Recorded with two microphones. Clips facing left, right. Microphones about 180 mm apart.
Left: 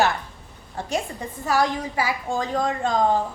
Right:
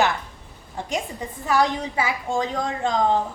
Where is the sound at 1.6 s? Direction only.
20° right (ahead or behind).